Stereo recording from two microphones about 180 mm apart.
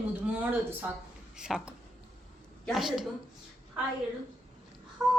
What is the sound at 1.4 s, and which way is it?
Speech, 5° right (ahead or behind).